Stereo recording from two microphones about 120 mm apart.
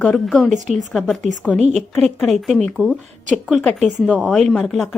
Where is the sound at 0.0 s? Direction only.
Centre (ahead or behind).